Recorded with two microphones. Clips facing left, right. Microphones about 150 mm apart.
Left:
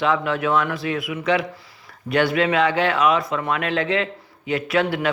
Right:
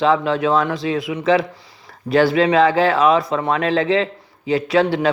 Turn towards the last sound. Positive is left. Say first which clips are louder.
# right 5 dB
turn(degrees=-30)  # may be behind; listen again after turning